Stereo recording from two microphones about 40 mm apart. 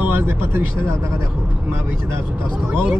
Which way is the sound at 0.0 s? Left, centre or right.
Right.